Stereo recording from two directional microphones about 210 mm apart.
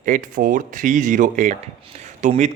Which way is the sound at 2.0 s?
35° right (ahead or behind).